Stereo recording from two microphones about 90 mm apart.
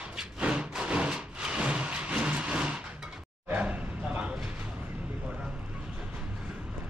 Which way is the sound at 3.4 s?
15° right (ahead or behind).